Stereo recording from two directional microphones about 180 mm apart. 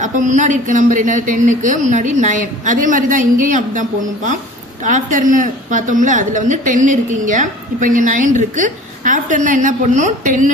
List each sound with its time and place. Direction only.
0.0 s speech: 45° right (ahead or behind)